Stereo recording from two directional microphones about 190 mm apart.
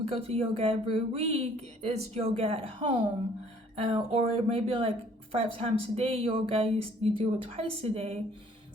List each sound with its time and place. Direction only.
0.0 s speech: 30° right (ahead or behind)